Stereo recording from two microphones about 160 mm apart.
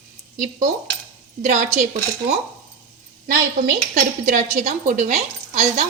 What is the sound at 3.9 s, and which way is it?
Speech, 50° right (ahead or behind).